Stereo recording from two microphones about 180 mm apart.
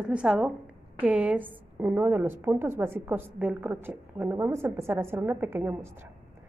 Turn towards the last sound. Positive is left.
turn(degrees=-10)  # may be behind; listen again after turning